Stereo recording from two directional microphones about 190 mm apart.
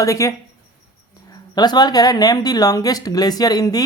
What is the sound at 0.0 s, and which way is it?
Speech, 15° left (ahead or behind).